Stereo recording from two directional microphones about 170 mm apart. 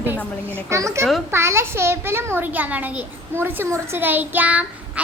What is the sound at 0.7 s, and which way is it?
A child's voice, 15° right (ahead or behind).